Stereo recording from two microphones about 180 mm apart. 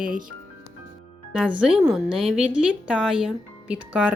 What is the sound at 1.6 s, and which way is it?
A woman's voice, 5° right (ahead or behind).